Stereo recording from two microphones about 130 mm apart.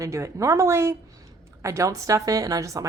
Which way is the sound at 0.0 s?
25° right (ahead or behind).